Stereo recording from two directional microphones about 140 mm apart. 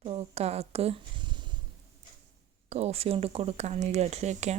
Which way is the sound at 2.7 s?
50° right (ahead or behind).